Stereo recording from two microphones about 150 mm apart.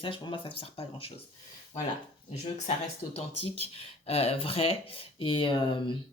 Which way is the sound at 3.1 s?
40° left (ahead or behind).